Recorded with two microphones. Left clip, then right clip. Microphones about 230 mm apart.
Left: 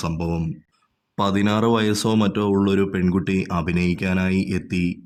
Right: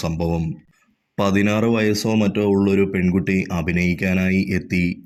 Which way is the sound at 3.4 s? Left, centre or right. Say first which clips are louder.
Right 1 dB; left.